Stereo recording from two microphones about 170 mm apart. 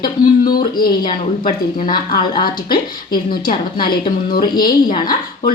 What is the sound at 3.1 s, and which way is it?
Speech, 60° left (ahead or behind).